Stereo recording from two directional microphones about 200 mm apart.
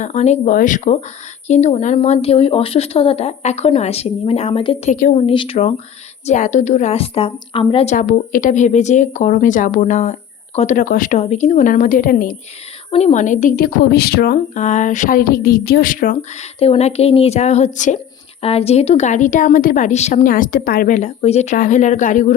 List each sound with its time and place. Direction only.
0.0 s speech: 35° left (ahead or behind)
7.9 s speech: 40° left (ahead or behind)
12.9 s speech: 30° left (ahead or behind); by 14.6 s 50° left (ahead or behind)
14.6 s speech: 35° left (ahead or behind)
16.6 s speech: 30° left (ahead or behind)